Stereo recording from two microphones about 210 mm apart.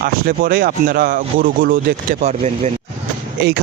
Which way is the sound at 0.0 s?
45° right (ahead or behind).